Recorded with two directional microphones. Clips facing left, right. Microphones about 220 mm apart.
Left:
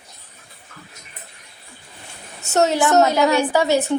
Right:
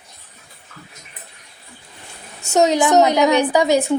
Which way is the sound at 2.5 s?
15° right (ahead or behind).